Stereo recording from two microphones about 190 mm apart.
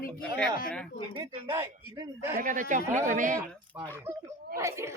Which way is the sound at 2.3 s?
45° right (ahead or behind).